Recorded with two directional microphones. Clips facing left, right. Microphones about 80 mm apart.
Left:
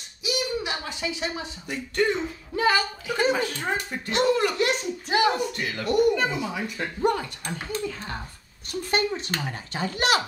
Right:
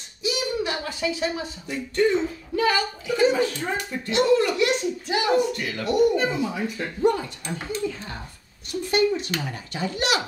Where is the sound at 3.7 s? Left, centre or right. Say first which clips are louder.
Right 2 dB; left.